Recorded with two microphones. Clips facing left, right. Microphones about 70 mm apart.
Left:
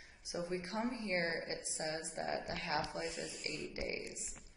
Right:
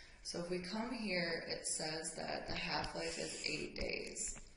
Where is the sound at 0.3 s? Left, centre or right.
Left.